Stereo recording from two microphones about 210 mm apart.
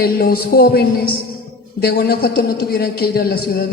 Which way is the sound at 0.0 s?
45° left (ahead or behind).